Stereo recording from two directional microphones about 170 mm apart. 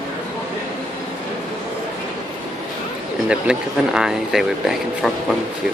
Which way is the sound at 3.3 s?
5° right (ahead or behind).